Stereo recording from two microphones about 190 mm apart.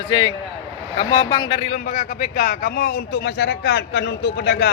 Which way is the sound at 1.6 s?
40° left (ahead or behind).